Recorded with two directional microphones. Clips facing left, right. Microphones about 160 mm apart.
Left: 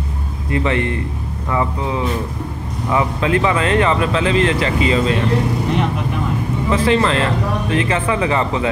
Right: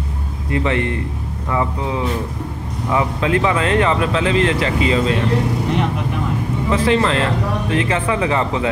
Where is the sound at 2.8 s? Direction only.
15° right (ahead or behind).